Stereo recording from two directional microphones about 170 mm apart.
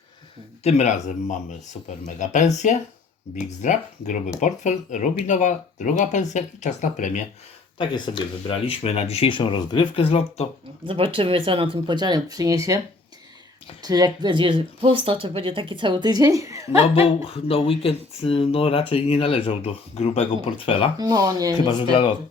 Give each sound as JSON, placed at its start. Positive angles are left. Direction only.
{"t": 0.6, "sound": "speech", "side_deg": 40}
{"t": 7.8, "sound": "speech", "side_deg": 25}
{"t": 10.8, "sound": "speech", "side_deg": -30}
{"t": 13.8, "sound": "speech", "side_deg": -25}
{"t": 16.9, "sound": "speech", "side_deg": 35}
{"t": 21.0, "sound": "speech", "side_deg": -20}
{"t": 21.6, "sound": "speech", "side_deg": 25}